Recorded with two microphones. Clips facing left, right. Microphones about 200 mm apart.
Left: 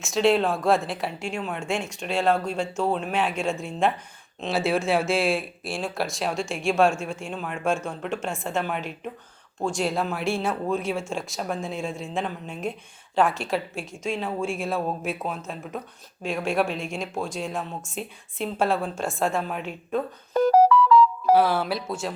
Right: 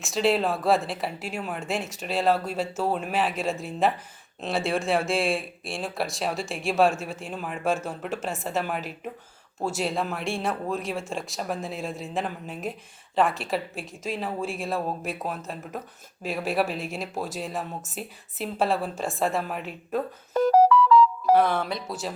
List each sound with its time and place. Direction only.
0.0 s speech: centre (ahead or behind)
20.7 s music: 55° left (ahead or behind)
21.3 s speech: 5° left (ahead or behind)